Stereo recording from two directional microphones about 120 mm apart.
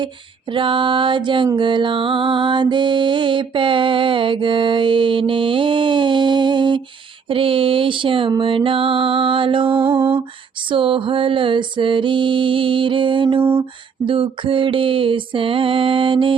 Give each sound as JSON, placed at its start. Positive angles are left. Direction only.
{"t": 0.5, "sound": "music", "side_deg": -45}
{"t": 9.9, "sound": "lullaby", "side_deg": -20}
{"t": 10.7, "sound": "music", "side_deg": -50}
{"t": 13.4, "sound": "a sound", "side_deg": -20}
{"t": 14.1, "sound": "music", "side_deg": -45}